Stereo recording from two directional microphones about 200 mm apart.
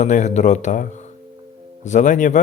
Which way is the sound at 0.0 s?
35° left (ahead or behind).